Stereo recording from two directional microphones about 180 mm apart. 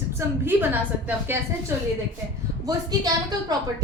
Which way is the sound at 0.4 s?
10° right (ahead or behind).